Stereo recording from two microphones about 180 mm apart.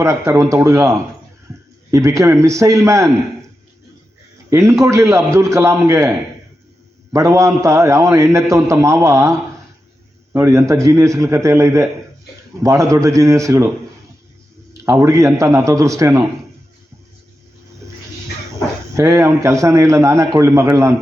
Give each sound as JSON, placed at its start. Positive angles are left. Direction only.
{"t": 0.0, "sound": "a man's voice", "side_deg": -15}
{"t": 4.4, "sound": "a man's voice", "side_deg": -15}
{"t": 10.3, "sound": "a man's voice", "side_deg": -15}
{"t": 14.7, "sound": "a man's voice", "side_deg": -15}
{"t": 18.9, "sound": "a man's voice", "side_deg": -15}